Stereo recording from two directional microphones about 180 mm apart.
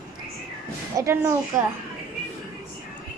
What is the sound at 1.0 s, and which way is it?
Speech, 15° right (ahead or behind).